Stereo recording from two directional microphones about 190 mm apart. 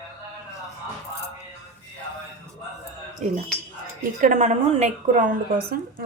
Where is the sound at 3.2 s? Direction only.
40° right (ahead or behind).